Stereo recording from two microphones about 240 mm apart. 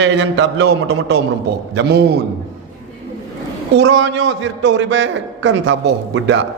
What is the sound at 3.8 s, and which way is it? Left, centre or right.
A man's voice, right.